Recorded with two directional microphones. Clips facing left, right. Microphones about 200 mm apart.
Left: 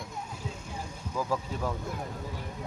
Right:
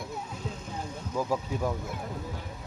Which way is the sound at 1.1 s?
15° right (ahead or behind).